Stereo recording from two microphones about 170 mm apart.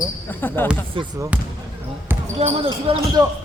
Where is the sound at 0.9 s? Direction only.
25° right (ahead or behind).